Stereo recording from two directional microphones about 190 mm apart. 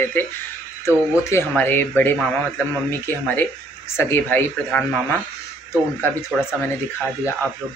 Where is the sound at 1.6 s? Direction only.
10° left (ahead or behind).